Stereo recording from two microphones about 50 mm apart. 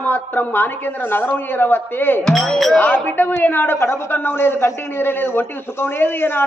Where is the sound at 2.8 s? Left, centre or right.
Left.